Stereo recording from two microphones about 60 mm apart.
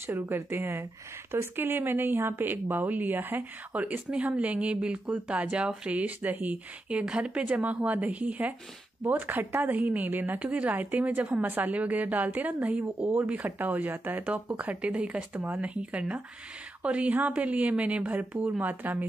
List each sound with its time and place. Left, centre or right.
0.0 s a woman's voice: right